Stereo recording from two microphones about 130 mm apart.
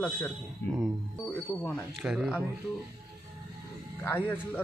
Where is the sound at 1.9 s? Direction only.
Centre (ahead or behind).